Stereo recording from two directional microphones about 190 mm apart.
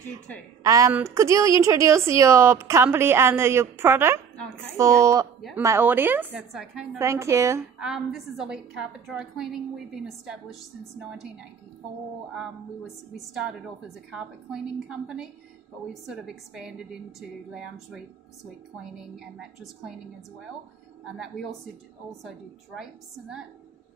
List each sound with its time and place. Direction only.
0.7 s a woman's voice: 15° right (ahead or behind)
7.0 s a woman's voice: 15° right (ahead or behind)
7.8 s a woman's voice: 5° right (ahead or behind)
13.1 s a woman's voice: centre (ahead or behind)
22.8 s a woman's voice: 5° right (ahead or behind)